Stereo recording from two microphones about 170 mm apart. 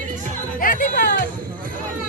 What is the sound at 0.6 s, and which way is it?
Speech, 55° left (ahead or behind).